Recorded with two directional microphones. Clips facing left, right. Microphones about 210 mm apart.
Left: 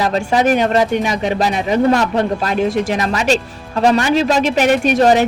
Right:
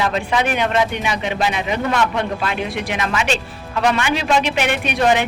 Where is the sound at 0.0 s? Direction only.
40° left (ahead or behind).